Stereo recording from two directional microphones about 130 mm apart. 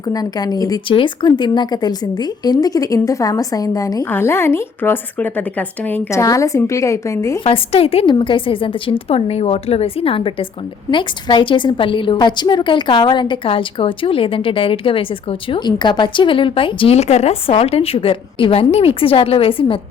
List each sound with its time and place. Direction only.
0.1 s a woman's voice: 30° left (ahead or behind)
7.4 s a woman's voice: 45° left (ahead or behind)